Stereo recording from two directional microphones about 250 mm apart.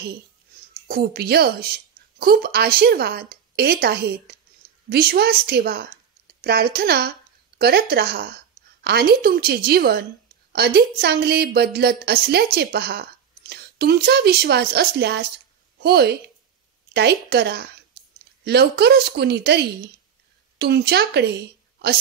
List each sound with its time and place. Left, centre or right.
0.8 s a woman's voice: right